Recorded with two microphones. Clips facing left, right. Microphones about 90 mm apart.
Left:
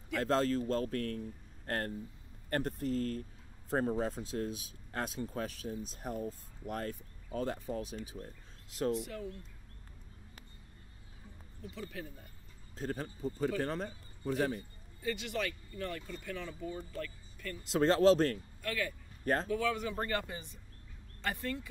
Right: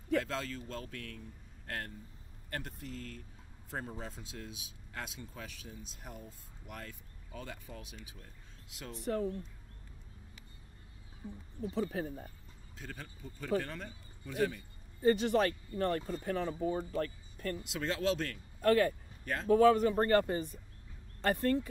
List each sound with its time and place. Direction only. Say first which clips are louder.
0.1 s speech: left 4 dB; 40° left (ahead or behind)
8.9 s speech: right 4 dB; 40° right (ahead or behind)
11.2 s speech: right 9 dB; 35° right (ahead or behind)
12.7 s speech: left 9 dB; 40° left (ahead or behind)
15.0 s speech: right 9 dB; 40° right (ahead or behind)
17.6 s speech: left 9 dB; 40° left (ahead or behind)
18.6 s speech: right 13 dB; 45° right (ahead or behind)